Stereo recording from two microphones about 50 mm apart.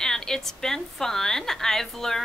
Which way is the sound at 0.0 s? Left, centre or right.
Centre.